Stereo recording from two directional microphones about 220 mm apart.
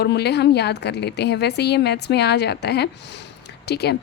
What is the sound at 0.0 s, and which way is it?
A woman's voice, 50° left (ahead or behind).